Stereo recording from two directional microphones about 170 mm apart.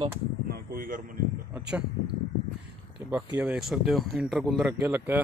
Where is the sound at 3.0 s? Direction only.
15° right (ahead or behind).